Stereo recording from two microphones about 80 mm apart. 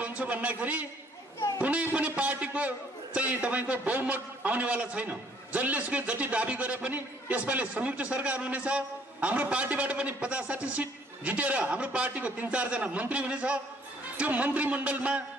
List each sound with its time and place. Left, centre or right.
0.0 s a man's voice: centre